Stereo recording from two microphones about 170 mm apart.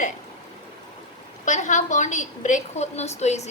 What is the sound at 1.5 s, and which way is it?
A woman's voice, 45° left (ahead or behind).